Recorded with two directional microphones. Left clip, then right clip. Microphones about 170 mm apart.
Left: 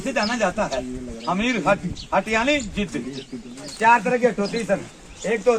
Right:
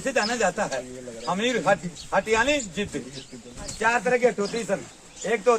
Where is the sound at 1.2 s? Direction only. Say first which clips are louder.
Left 2 dB; 20° right (ahead or behind).